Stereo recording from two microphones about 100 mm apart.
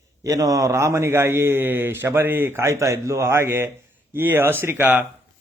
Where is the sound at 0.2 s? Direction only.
35° right (ahead or behind).